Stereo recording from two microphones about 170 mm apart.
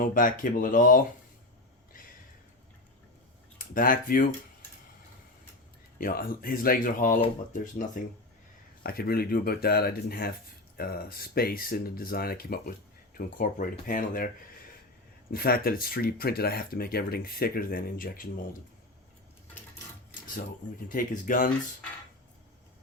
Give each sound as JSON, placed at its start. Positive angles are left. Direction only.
{"t": 0.0, "sound": "speech", "side_deg": 55}
{"t": 3.8, "sound": "speech", "side_deg": 55}
{"t": 6.0, "sound": "speech", "side_deg": 60}
{"t": 8.8, "sound": "speech", "side_deg": 60}
{"t": 15.3, "sound": "speech", "side_deg": 60}
{"t": 20.9, "sound": "speech", "side_deg": 55}